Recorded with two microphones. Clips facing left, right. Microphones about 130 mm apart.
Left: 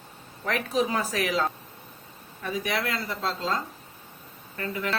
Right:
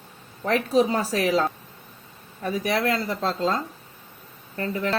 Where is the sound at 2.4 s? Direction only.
40° right (ahead or behind).